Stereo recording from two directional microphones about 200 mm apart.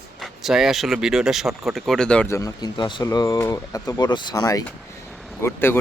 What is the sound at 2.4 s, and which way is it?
Speech, 20° left (ahead or behind).